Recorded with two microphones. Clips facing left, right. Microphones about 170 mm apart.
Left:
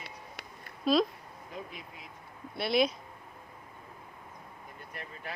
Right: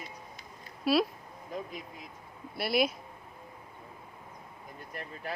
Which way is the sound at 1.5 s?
40° right (ahead or behind).